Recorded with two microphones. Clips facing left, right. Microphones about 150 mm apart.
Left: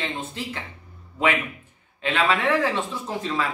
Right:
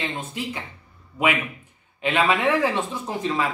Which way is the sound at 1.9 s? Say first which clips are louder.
Right 1 dB; 15° right (ahead or behind).